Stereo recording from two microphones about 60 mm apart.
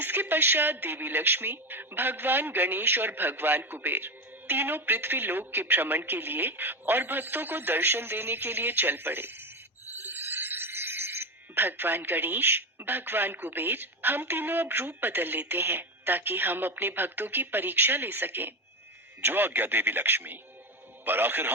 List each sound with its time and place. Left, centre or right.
0.0 s speech: right